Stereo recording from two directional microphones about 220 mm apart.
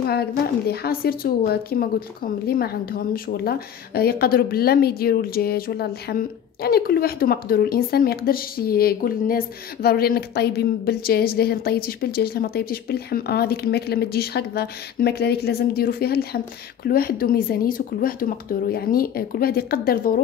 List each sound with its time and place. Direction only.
0.0 s a woman's voice: 45° left (ahead or behind)